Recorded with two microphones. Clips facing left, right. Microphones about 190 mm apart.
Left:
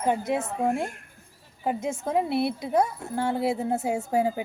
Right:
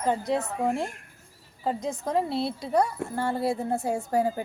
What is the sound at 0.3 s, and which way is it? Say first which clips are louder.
Speech: left 1 dB; 15° left (ahead or behind).